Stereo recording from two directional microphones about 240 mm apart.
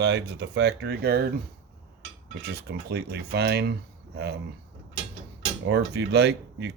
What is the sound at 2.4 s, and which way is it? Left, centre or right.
Speech, right.